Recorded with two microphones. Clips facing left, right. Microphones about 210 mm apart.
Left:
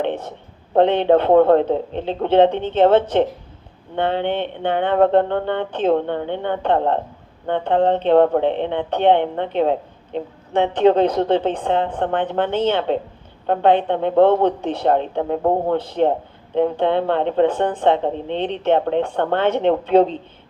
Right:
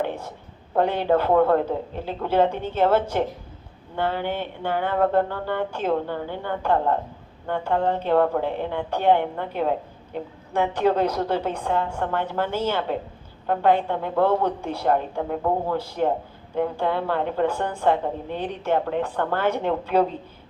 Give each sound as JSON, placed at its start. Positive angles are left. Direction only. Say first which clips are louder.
{"t": 0.8, "sound": "speech", "louder": "left 6 dB", "side_deg": 25}